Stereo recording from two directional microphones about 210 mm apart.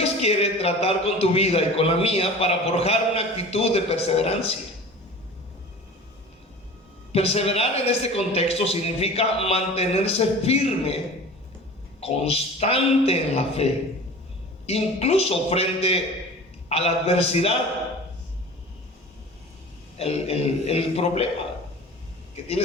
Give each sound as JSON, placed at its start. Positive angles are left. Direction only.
{"t": 0.0, "sound": "a man's voice", "side_deg": 30}
{"t": 7.1, "sound": "a man's voice", "side_deg": 30}
{"t": 14.7, "sound": "a man's voice", "side_deg": 30}
{"t": 20.0, "sound": "a man's voice", "side_deg": 30}